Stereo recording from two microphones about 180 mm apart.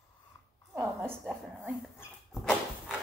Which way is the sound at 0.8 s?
5° right (ahead or behind).